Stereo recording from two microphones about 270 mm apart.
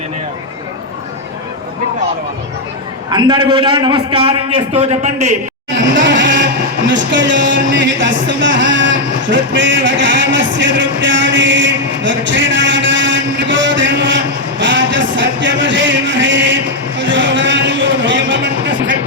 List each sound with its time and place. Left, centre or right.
3.1 s a man's voice: centre
5.7 s vehicle: right
14.6 s a sound: right